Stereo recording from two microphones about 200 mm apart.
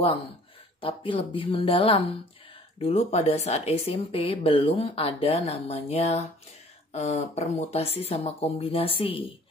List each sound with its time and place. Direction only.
0.7 s speech: 25° left (ahead or behind)